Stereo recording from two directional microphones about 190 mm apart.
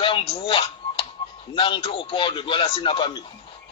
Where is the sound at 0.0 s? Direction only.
25° left (ahead or behind).